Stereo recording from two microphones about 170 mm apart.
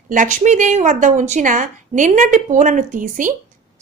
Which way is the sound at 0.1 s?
50° right (ahead or behind).